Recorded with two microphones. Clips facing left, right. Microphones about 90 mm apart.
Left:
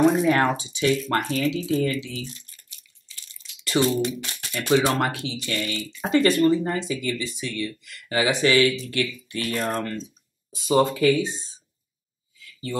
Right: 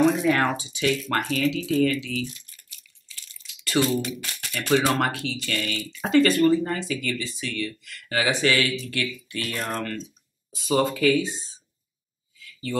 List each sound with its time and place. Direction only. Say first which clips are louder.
0.1 s speech: left 2 dB; 30° left (ahead or behind)
10.5 s speech: left 3 dB; 20° left (ahead or behind)